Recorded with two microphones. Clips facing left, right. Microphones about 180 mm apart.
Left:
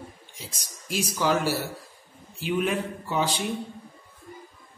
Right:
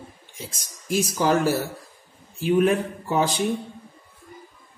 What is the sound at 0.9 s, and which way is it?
A man's voice, 50° right (ahead or behind).